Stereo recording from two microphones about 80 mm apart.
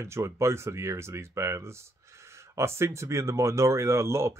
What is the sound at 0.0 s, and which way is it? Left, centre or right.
Speech, right.